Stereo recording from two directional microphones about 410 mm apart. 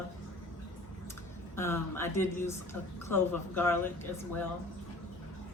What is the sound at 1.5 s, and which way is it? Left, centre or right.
Speech, centre.